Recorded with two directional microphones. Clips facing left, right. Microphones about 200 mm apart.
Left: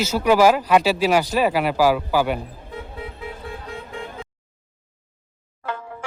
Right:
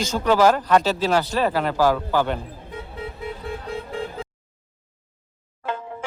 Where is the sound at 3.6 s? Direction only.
35° right (ahead or behind).